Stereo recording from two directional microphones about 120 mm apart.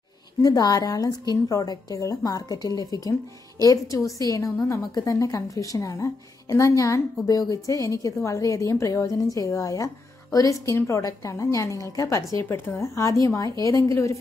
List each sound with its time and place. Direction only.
0.4 s a woman's voice: 30° left (ahead or behind)